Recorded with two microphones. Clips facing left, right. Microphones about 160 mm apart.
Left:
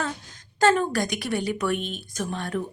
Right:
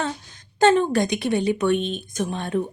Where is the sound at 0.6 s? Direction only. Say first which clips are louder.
Right 4 dB; 25° right (ahead or behind).